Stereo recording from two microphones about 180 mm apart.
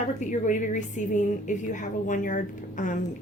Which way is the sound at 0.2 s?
45° left (ahead or behind).